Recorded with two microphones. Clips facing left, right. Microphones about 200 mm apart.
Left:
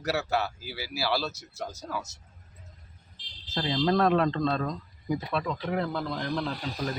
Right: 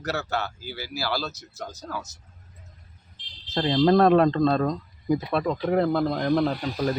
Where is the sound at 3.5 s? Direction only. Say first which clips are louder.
Right 6 dB; 45° right (ahead or behind).